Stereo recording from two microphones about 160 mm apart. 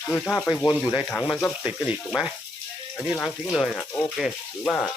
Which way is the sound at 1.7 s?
10° right (ahead or behind).